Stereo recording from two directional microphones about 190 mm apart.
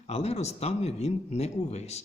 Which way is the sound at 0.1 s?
35° left (ahead or behind).